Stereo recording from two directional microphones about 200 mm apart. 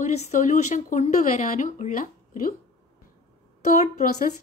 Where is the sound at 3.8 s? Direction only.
45° left (ahead or behind).